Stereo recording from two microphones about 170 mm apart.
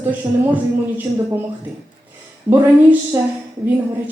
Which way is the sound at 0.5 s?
10° right (ahead or behind).